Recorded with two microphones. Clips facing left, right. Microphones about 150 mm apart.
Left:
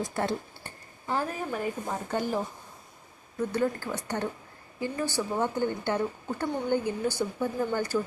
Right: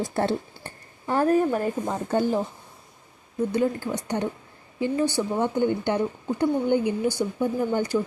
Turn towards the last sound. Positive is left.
turn(degrees=-20)  # may be behind; listen again after turning